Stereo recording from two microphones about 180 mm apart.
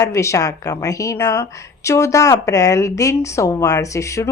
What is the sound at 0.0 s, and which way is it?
Speech, 15° left (ahead or behind).